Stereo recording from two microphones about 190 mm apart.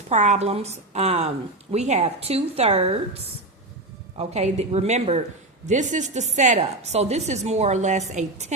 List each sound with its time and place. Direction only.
0.1 s a woman's voice: 35° right (ahead or behind)